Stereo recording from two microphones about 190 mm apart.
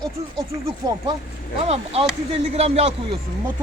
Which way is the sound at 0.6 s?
20° right (ahead or behind).